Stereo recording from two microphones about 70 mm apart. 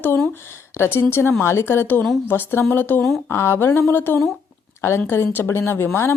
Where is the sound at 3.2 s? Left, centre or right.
Left.